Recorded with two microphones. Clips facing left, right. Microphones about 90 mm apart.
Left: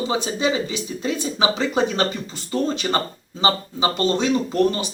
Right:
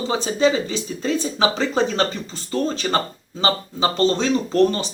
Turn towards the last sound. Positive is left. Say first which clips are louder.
# right 2 dB
turn(degrees=15)  # may be behind; listen again after turning